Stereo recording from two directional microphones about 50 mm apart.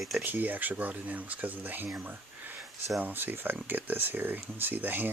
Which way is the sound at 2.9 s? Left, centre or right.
Right.